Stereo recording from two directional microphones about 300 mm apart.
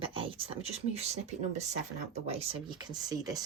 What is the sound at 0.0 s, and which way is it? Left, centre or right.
Speech, centre.